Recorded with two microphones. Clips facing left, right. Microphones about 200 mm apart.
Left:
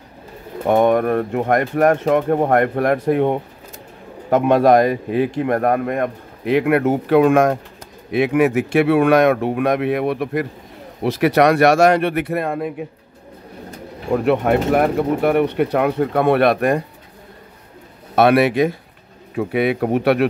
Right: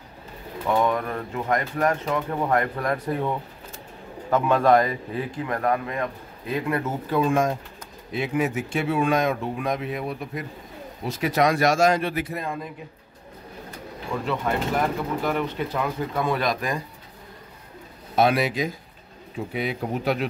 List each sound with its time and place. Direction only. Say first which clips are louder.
0.7 s speech: left 8 dB; 60° left (ahead or behind)
4.4 s speech: left 6 dB; 70° left (ahead or behind)
14.1 s speech: left 10 dB; 65° left (ahead or behind)
18.1 s speech: left 7 dB; 65° left (ahead or behind)